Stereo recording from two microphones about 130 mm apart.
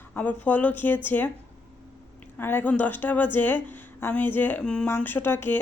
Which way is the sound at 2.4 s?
15° left (ahead or behind).